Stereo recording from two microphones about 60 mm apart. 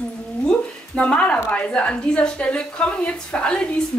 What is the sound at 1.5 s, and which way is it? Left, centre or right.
A woman's voice, left.